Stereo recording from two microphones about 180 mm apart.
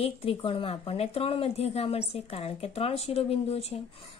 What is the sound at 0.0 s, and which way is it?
Speech, 30° left (ahead or behind).